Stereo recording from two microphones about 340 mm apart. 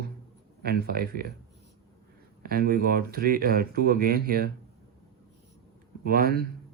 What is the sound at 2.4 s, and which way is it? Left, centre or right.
Speech, right.